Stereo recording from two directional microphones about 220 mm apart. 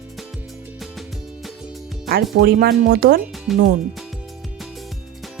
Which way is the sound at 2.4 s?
45° right (ahead or behind).